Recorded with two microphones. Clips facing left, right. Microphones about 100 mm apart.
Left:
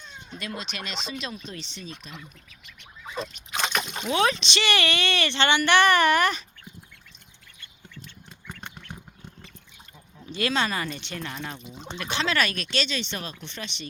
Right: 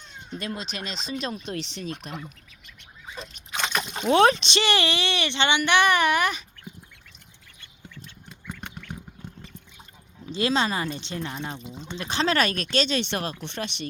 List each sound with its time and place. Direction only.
0.3 s speech: 35° right (ahead or behind)
1.5 s speech: 65° right (ahead or behind)
3.6 s splash: 5° left (ahead or behind)
4.1 s speech: 40° right (ahead or behind); by 6.4 s 10° right (ahead or behind)
10.2 s speech: 25° right (ahead or behind)
11.9 s speech: 35° right (ahead or behind); by 13.8 s 55° right (ahead or behind)